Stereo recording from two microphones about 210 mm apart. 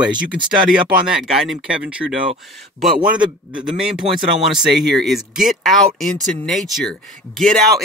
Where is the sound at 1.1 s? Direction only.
Centre (ahead or behind).